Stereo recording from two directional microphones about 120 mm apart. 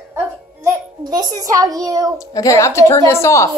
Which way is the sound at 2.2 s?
30° left (ahead or behind).